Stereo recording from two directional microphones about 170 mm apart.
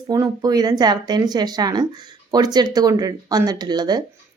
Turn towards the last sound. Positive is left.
turn(degrees=-25)  # may be behind; listen again after turning